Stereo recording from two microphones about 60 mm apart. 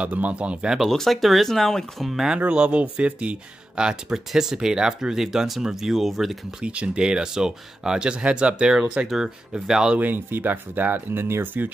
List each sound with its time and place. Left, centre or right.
0.0 s speech: right
0.7 s speech: centre
2.3 s speech: centre
6.6 s speech: right
9.9 s speech: right
11.4 s speech: right